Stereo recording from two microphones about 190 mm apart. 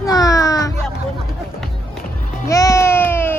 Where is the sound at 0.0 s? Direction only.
20° left (ahead or behind).